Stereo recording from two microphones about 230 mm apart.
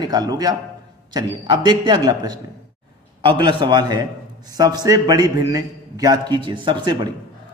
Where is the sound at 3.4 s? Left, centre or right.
Right.